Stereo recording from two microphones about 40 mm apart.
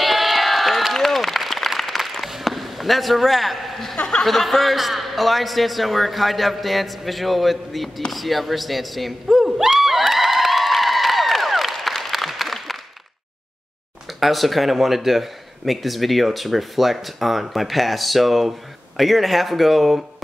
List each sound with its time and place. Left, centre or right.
0.0 s applause: centre
3.9 s speech: centre
4.3 s speech: centre
9.8 s a sound: centre
14.0 s speech: centre